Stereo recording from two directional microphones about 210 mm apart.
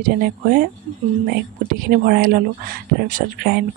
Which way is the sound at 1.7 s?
45° right (ahead or behind).